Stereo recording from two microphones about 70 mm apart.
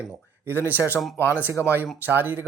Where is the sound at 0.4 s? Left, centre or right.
Right.